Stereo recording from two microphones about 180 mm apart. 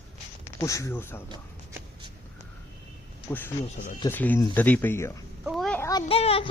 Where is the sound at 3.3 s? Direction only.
10° left (ahead or behind).